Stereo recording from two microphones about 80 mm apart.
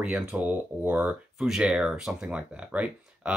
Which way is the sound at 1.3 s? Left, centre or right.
Centre.